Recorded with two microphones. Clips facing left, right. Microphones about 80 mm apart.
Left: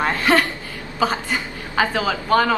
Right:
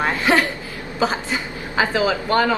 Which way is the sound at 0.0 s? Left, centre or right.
Centre.